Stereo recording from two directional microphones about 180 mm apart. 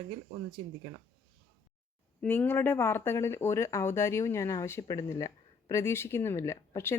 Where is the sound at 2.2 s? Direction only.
10° left (ahead or behind).